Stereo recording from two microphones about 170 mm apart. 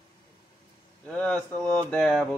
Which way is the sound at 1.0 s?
10° left (ahead or behind).